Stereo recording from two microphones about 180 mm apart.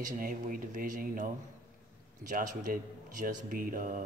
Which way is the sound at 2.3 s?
45° right (ahead or behind).